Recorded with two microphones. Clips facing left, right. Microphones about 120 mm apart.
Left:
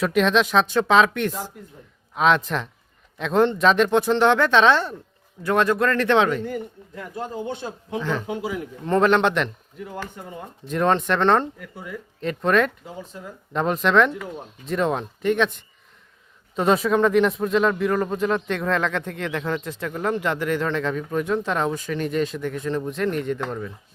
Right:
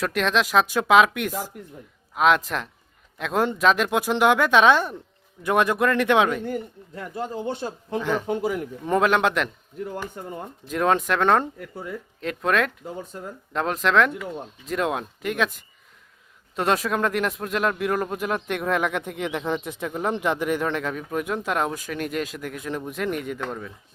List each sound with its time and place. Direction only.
0.0 s speech: centre (ahead or behind)
8.3 s a man's voice: 50° right (ahead or behind)
8.9 s speech: 5° right (ahead or behind)
10.7 s speech: 5° right (ahead or behind)